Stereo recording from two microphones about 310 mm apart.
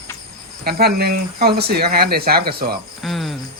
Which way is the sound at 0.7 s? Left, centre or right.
Right.